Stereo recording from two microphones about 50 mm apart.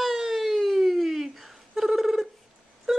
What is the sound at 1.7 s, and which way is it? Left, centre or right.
Fowl, centre.